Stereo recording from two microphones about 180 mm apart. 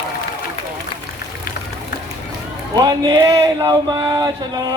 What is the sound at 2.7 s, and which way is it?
Speech, 20° right (ahead or behind).